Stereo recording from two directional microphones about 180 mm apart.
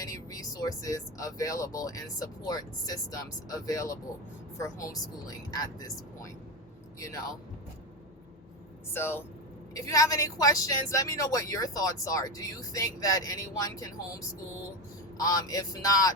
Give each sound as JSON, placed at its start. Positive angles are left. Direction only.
{"t": 0.0, "sound": "a woman's voice", "side_deg": 20}
{"t": 8.9, "sound": "a woman's voice", "side_deg": 10}